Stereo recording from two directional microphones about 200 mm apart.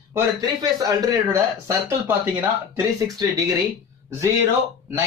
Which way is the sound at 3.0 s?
15° right (ahead or behind).